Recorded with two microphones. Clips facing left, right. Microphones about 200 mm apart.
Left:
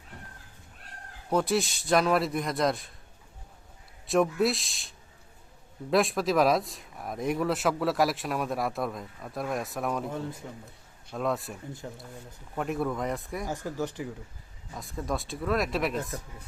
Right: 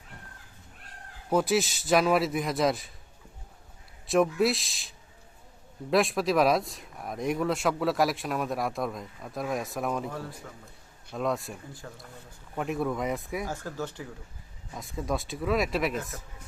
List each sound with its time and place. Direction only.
1.3 s speech: 5° right (ahead or behind)
4.0 s speech: centre (ahead or behind)
10.1 s speech: 20° left (ahead or behind)
11.1 s speech: centre (ahead or behind)
11.8 s speech: 20° left (ahead or behind)
12.5 s speech: centre (ahead or behind)
13.4 s speech: 15° left (ahead or behind)
14.8 s speech: centre (ahead or behind)